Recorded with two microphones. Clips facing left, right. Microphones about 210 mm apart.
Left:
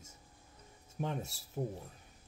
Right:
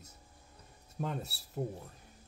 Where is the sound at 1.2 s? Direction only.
90° left.